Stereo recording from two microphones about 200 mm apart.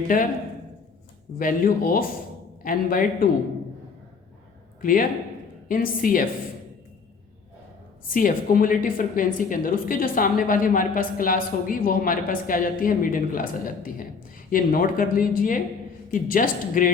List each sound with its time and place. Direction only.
0.1 s a woman's voice: 45° left (ahead or behind)
1.4 s a woman's voice: 45° left (ahead or behind)
4.8 s a woman's voice: 45° left (ahead or behind)
8.1 s a woman's voice: 45° left (ahead or behind)